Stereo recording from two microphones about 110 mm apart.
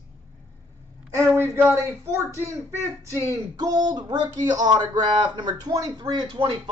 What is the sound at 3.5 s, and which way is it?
A man's voice, 35° right (ahead or behind).